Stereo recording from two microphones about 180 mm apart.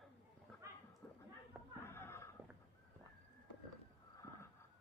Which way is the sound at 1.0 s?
5° left (ahead or behind).